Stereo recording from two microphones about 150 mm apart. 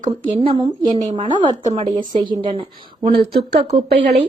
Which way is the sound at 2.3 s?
35° right (ahead or behind).